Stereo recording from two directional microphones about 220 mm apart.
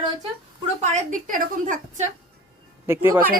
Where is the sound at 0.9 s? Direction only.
35° right (ahead or behind).